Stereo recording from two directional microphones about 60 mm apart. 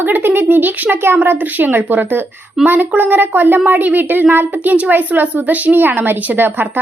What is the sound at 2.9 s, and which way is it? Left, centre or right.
Speech, right.